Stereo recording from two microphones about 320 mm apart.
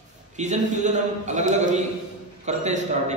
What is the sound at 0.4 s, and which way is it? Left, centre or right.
A man's voice, right.